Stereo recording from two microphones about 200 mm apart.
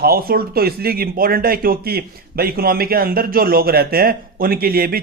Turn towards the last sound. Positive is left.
turn(degrees=-50)  # may be behind; listen again after turning